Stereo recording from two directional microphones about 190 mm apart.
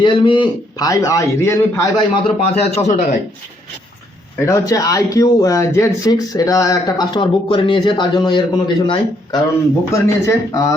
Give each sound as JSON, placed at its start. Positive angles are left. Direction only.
{"t": 0.0, "sound": "a man's voice", "side_deg": 25}
{"t": 2.4, "sound": "speech", "side_deg": 35}
{"t": 4.4, "sound": "a man's voice", "side_deg": 15}